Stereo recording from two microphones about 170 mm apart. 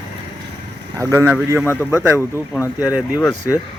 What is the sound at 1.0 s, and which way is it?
Speech, 20° right (ahead or behind).